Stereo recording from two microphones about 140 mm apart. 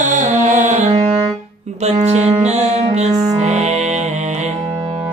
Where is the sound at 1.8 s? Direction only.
50° right (ahead or behind).